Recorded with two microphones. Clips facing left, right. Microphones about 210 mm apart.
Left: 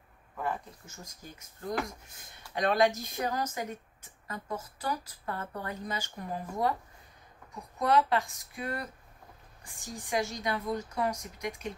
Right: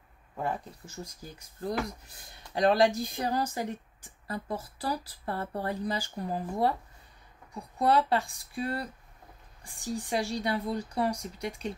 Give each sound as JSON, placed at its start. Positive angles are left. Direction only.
{"t": 1.6, "sound": "speech", "side_deg": -35}
{"t": 10.0, "sound": "speech", "side_deg": -30}